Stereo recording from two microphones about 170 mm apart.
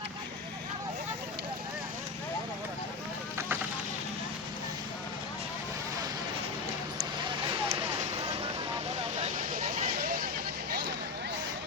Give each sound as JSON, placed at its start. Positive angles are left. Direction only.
{"t": 9.2, "sound": "vehicle", "side_deg": -55}